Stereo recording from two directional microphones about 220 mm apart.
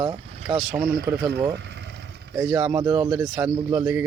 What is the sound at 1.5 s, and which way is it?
Vehicle, 55° right (ahead or behind).